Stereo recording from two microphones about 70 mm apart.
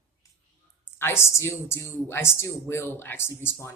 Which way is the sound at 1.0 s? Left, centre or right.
Left.